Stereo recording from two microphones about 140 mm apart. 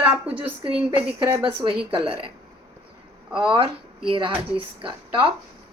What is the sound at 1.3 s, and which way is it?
Speech, 45° right (ahead or behind).